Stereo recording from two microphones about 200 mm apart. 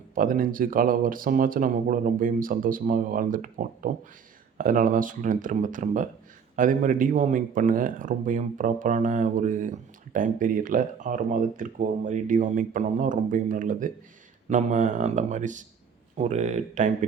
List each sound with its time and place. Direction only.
0.1 s speech: 45° right (ahead or behind)